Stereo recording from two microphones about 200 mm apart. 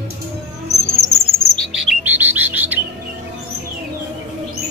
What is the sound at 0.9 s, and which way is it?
Bird, centre (ahead or behind).